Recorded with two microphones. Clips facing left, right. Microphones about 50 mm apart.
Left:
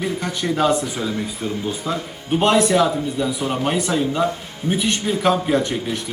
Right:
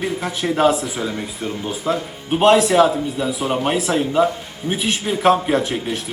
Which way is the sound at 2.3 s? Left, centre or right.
Centre.